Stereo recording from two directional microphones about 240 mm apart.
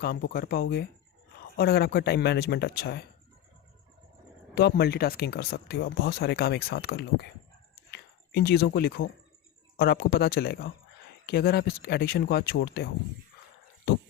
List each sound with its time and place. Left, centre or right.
0.0 s speech: left
4.5 s speech: left
7.9 s a sound: left
9.7 s speech: left